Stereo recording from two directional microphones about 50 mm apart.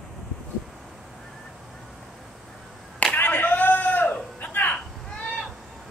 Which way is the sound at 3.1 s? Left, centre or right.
Left.